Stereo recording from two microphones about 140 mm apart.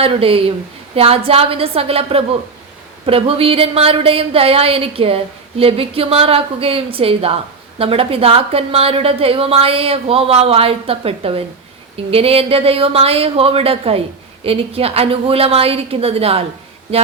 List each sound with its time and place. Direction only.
0.0 s speech: 40° right (ahead or behind)